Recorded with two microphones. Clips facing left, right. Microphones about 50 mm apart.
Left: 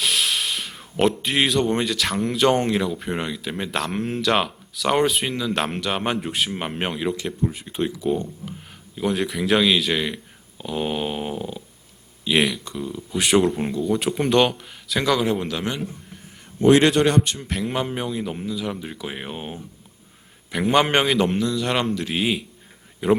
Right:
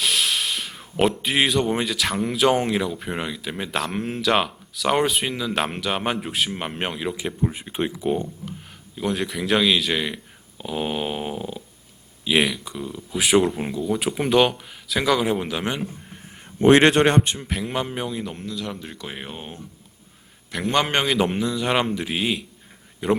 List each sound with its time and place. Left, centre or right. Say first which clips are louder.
0.0 s speech: even; centre
7.2 s speech: even; centre
9.0 s speech: left 2 dB; centre
16.6 s a man's voice: right 1 dB; right
17.3 s a man's voice: left 1 dB; centre
21.3 s speech: even; centre
22.1 s speech: left 1 dB; centre